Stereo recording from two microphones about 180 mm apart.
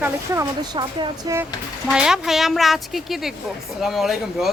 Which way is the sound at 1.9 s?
5° right (ahead or behind).